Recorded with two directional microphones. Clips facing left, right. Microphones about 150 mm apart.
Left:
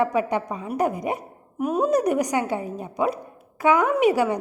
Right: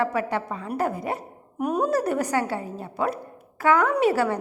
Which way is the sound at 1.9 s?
15° left (ahead or behind).